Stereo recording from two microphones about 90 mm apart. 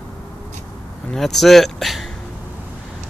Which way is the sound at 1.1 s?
5° left (ahead or behind).